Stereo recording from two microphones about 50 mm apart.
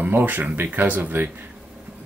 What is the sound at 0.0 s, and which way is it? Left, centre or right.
Speech, right.